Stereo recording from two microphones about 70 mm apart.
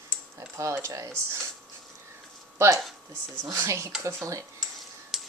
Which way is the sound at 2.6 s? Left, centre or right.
Right.